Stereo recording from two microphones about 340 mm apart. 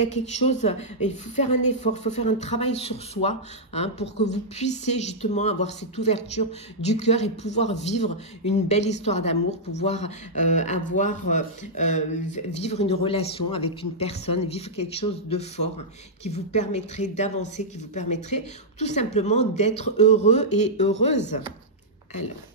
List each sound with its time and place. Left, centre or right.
0.0 s speech: centre